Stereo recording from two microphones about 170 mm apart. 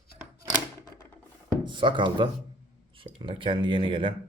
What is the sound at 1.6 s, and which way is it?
Speech, 30° right (ahead or behind).